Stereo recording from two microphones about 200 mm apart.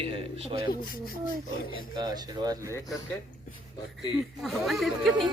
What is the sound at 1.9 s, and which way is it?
Speech, 20° right (ahead or behind).